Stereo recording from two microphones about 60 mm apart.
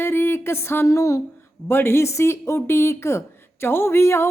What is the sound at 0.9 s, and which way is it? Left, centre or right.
Speech, left.